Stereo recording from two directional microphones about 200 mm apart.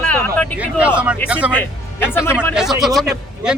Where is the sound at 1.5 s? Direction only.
10° left (ahead or behind).